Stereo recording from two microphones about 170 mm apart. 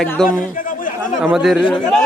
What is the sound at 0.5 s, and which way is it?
Chatter, 55° left (ahead or behind).